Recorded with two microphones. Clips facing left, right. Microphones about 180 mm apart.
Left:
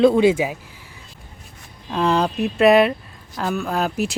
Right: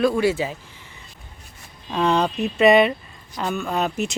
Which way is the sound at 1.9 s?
Centre (ahead or behind).